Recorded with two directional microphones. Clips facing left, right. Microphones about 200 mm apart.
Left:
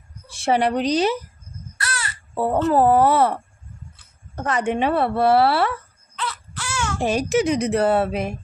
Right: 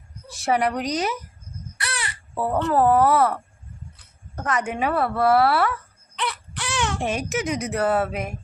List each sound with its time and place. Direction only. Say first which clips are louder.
0.3 s speech: left 2 dB; 25° left (ahead or behind)
2.4 s speech: left 3 dB; 30° left (ahead or behind)
4.4 s speech: left 3 dB; 30° left (ahead or behind)
6.1 s baby cry: right 1 dB; 15° right (ahead or behind)
7.0 s speech: left 6 dB; 35° left (ahead or behind)